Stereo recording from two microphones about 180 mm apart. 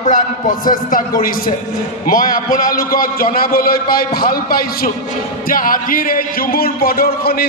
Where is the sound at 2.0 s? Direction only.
50° left (ahead or behind).